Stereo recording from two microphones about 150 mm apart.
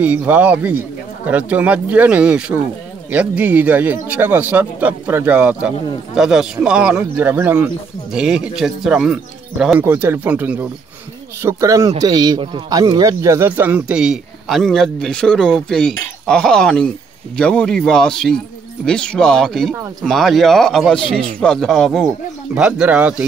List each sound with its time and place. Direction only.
0.0 s a man's voice: 10° right (ahead or behind)